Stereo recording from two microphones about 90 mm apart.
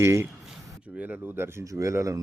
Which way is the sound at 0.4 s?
15° right (ahead or behind).